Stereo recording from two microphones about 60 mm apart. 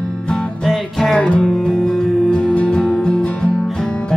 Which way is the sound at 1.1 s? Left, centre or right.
Centre.